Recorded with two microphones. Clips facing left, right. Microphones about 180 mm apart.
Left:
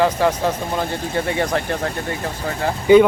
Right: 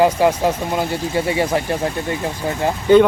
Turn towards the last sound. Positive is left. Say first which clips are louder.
# even
turn(degrees=15)  # may be behind; listen again after turning